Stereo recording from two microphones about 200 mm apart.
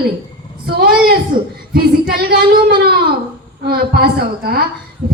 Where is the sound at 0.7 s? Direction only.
50° right (ahead or behind).